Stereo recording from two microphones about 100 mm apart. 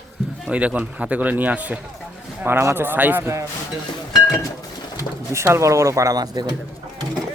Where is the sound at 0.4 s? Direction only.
10° right (ahead or behind).